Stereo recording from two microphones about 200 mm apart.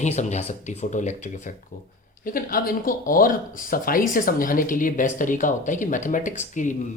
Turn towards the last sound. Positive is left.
turn(degrees=40)  # may be behind; listen again after turning